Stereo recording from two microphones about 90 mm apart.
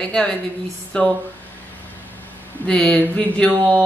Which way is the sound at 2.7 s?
15° left (ahead or behind).